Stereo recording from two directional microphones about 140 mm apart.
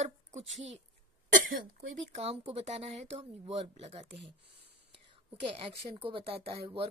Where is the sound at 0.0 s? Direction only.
50° right (ahead or behind).